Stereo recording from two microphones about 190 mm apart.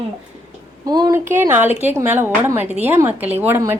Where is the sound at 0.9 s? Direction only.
20° right (ahead or behind).